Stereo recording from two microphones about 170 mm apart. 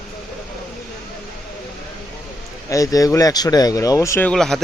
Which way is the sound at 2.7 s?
20° left (ahead or behind).